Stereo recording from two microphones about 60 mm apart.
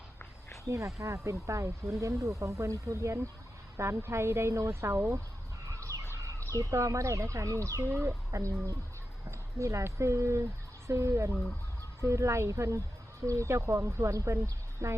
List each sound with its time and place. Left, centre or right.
0.7 s speech: right
5.7 s a sound: right
6.2 s speech: right